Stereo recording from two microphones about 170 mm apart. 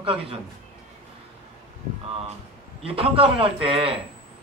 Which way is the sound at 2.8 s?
35° right (ahead or behind).